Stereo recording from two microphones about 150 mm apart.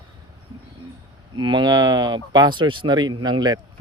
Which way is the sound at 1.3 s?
30° right (ahead or behind).